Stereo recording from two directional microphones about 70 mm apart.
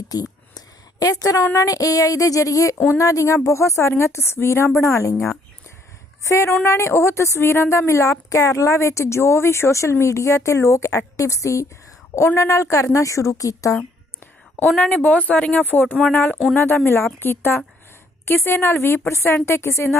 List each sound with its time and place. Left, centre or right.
0.1 s a sound: left
1.5 s speech: left
2.7 s a woman's voice: left
3.0 s a woman's voice: left
14.8 s a woman's voice: left